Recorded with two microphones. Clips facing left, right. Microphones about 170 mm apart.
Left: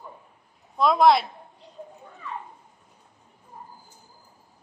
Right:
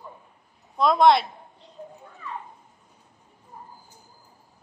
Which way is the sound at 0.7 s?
Centre (ahead or behind).